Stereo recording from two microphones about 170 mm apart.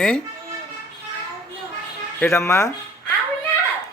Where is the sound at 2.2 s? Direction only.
10° left (ahead or behind).